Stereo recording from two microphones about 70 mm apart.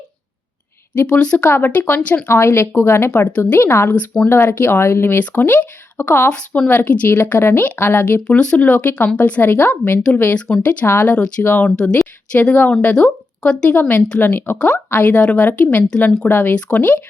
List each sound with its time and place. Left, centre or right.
1.0 s speech: centre; by 3.1 s left
3.1 s speech: centre
3.6 s speech: left
8.3 s speech: centre
11.8 s speech: centre